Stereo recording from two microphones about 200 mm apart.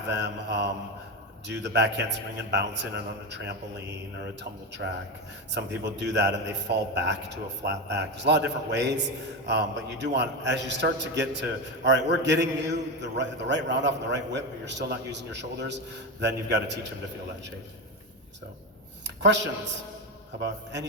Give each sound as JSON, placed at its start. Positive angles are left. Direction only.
{"t": 0.0, "sound": "a man's voice", "side_deg": -60}
{"t": 5.5, "sound": "a man's voice", "side_deg": -60}
{"t": 19.0, "sound": "speech", "side_deg": -60}